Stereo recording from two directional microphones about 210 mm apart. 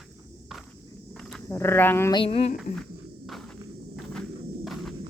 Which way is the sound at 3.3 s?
Centre (ahead or behind).